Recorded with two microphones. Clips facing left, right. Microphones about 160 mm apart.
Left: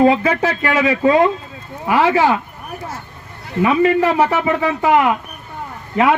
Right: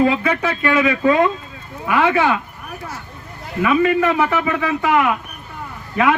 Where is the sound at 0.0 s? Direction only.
35° left (ahead or behind).